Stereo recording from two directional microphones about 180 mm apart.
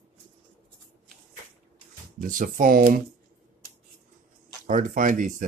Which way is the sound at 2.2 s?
50° right (ahead or behind).